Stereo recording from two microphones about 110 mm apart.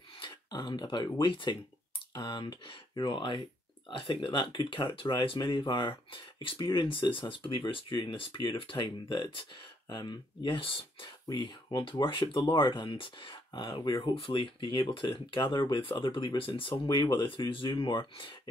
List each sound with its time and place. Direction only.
0.2 s a sound: 40° left (ahead or behind)
1.2 s speech: 45° left (ahead or behind)
11.2 s speech: 40° left (ahead or behind)
16.8 s speech: 40° left (ahead or behind)